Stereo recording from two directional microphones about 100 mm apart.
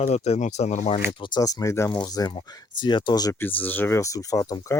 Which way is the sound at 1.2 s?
50° left (ahead or behind).